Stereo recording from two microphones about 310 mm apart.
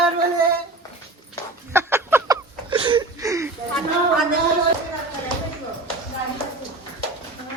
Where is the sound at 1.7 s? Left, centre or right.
Centre.